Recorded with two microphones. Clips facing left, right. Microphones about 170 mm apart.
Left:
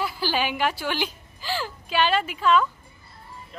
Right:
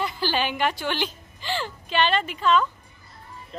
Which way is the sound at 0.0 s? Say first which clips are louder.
Even; 5° left (ahead or behind).